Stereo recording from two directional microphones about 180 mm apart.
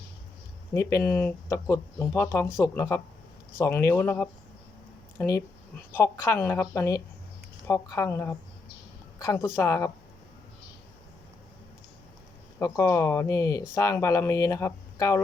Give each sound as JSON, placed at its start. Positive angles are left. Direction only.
{"t": 0.7, "sound": "speech", "side_deg": 15}
{"t": 5.9, "sound": "speech", "side_deg": 15}
{"t": 12.5, "sound": "speech", "side_deg": 15}